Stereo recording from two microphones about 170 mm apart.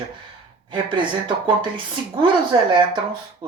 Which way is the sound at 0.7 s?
30° right (ahead or behind).